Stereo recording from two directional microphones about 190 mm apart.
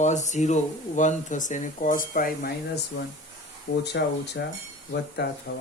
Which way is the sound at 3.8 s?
60° left (ahead or behind).